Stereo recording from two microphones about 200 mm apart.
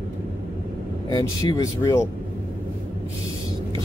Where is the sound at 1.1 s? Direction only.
20° left (ahead or behind).